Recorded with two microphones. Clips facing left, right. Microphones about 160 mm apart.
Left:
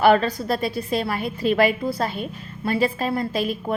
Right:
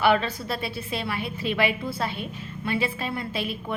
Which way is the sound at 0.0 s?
40° left (ahead or behind).